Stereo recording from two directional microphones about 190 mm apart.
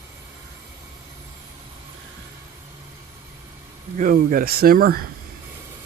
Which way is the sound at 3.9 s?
45° right (ahead or behind).